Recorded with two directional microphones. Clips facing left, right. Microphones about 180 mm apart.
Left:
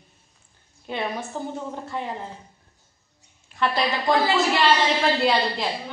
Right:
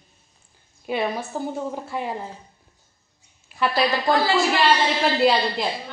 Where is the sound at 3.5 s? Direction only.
5° right (ahead or behind).